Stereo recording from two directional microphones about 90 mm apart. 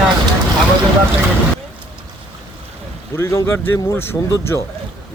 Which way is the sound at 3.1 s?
30° left (ahead or behind).